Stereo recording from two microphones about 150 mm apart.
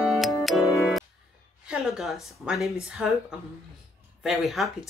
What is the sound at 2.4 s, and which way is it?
Speech, centre (ahead or behind).